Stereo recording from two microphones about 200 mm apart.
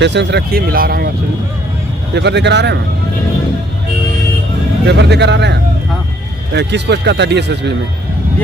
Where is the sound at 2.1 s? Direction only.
60° right (ahead or behind).